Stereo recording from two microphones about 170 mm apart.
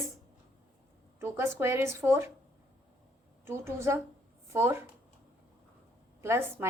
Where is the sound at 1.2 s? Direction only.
15° right (ahead or behind).